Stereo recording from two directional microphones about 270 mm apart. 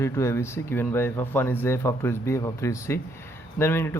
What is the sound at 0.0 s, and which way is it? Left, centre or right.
A man's voice, centre.